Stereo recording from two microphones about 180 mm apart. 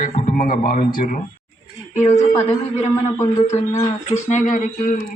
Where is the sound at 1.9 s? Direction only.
40° left (ahead or behind).